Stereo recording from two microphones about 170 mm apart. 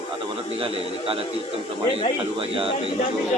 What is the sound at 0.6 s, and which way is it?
Speech, 30° right (ahead or behind).